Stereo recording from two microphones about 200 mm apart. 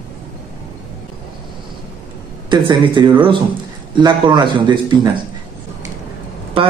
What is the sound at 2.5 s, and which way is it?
A man's voice, 25° right (ahead or behind).